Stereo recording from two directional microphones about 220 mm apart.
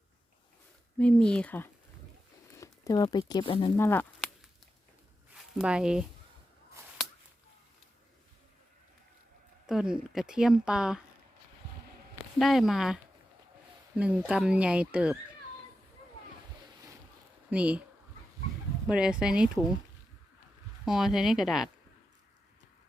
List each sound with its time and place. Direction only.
0.9 s speech: 5° left (ahead or behind); by 3.7 s 20° left (ahead or behind)
3.8 s speech: 10° left (ahead or behind)
5.3 s speech: 5° right (ahead or behind)
9.6 s speech: centre (ahead or behind)
12.4 s speech: centre (ahead or behind)
17.5 s speech: 5° right (ahead or behind)
18.9 s speech: 5° right (ahead or behind)
20.8 s speech: centre (ahead or behind)